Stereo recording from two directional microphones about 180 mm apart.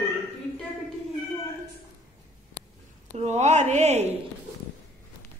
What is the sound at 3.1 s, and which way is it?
Speech, 40° right (ahead or behind).